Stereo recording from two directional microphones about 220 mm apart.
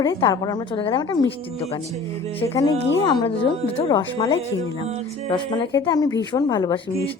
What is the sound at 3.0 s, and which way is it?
A woman's voice, 20° left (ahead or behind).